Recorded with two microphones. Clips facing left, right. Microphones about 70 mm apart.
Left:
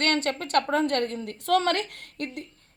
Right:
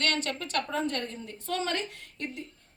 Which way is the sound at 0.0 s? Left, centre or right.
Left.